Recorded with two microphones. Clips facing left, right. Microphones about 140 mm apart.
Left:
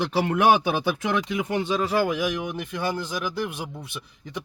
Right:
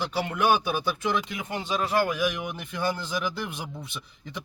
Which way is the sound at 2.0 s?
20° left (ahead or behind).